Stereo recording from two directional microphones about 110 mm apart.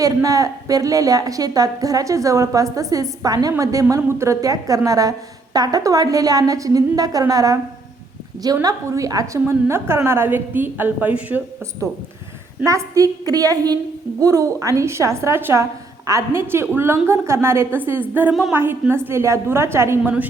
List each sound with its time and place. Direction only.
0.0 s a woman's voice: 30° right (ahead or behind)
8.6 s a woman's voice: 30° right (ahead or behind); by 11.4 s 15° right (ahead or behind)
12.6 s a woman's voice: 30° right (ahead or behind)